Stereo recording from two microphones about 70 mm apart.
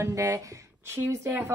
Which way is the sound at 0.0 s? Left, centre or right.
Right.